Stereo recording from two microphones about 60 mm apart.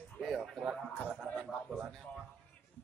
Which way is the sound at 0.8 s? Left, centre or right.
Centre.